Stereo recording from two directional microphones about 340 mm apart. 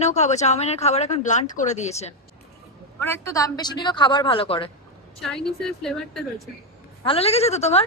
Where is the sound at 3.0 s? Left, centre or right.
Centre.